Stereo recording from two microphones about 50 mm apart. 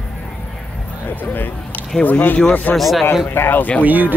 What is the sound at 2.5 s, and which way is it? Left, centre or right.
Speech, left.